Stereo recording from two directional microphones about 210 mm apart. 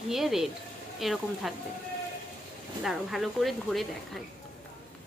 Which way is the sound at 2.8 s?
Centre (ahead or behind).